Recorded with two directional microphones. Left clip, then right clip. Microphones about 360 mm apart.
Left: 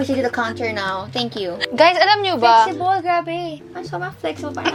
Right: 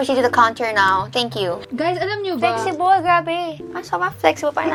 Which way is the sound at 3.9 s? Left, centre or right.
Right.